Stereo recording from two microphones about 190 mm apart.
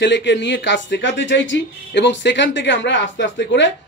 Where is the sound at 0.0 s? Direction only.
70° left (ahead or behind).